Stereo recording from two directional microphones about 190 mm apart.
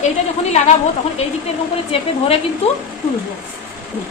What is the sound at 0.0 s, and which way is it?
A woman's voice, 35° left (ahead or behind).